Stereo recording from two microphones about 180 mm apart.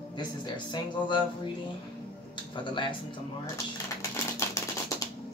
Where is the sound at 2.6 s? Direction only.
25° left (ahead or behind).